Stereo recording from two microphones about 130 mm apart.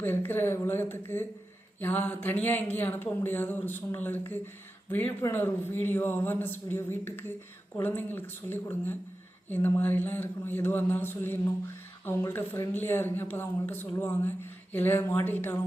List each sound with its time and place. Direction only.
0.0 s a man's voice: 15° left (ahead or behind)